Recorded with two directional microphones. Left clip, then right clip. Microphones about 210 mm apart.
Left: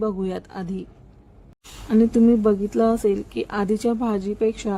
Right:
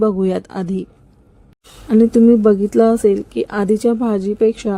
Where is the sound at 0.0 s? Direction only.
30° right (ahead or behind).